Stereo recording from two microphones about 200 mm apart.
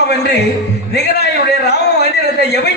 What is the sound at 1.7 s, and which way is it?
A man's voice, 55° left (ahead or behind).